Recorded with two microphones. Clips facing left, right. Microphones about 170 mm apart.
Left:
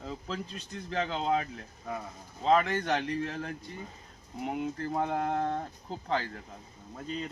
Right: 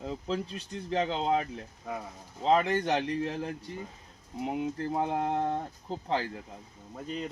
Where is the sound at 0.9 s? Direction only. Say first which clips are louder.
Right 2 dB; 25° right (ahead or behind).